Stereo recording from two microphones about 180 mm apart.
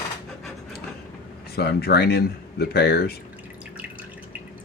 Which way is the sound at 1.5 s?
60° left (ahead or behind).